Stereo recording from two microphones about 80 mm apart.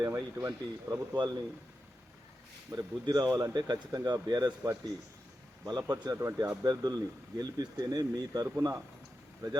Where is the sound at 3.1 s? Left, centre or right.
Right.